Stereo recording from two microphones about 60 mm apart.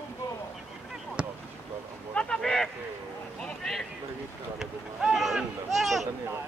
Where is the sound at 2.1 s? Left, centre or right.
Centre.